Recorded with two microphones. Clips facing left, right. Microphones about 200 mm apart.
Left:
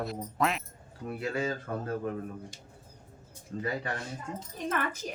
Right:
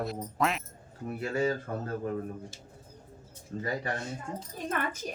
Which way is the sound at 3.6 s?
35° right (ahead or behind).